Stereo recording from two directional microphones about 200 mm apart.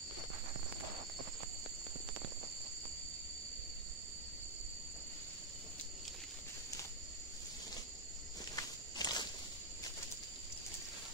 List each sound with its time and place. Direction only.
8.5 s walk: 20° left (ahead or behind)